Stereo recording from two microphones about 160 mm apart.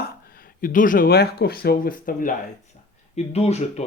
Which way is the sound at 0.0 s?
65° left (ahead or behind).